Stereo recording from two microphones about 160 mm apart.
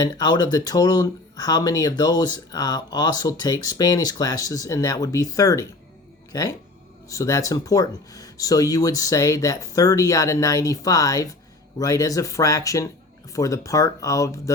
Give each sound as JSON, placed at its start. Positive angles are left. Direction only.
{"t": 0.0, "sound": "speech", "side_deg": 25}